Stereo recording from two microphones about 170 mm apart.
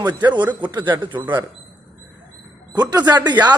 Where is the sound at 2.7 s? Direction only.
25° right (ahead or behind).